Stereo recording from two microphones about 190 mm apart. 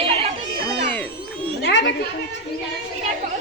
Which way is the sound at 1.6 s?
70° left (ahead or behind).